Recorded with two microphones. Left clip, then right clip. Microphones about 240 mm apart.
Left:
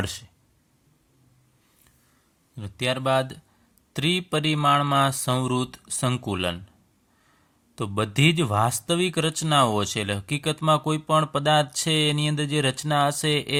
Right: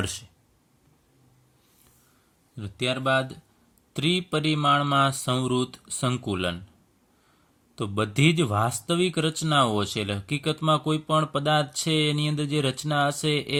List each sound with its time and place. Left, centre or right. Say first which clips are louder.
0.0 s speech: even; left
2.6 s speech: left 1 dB; left
7.8 s speech: left 1 dB; left